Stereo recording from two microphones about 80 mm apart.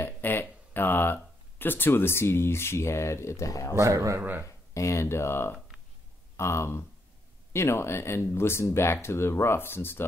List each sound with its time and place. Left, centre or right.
0.0 s speech: left
3.7 s speech: right
4.2 s speech: right
4.5 s speech: left